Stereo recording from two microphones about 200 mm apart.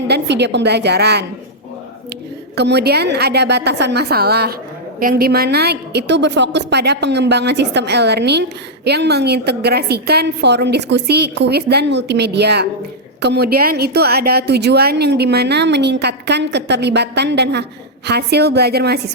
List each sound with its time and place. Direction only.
0.1 s a woman's voice: 60° right (ahead or behind)
2.6 s a woman's voice: 55° right (ahead or behind)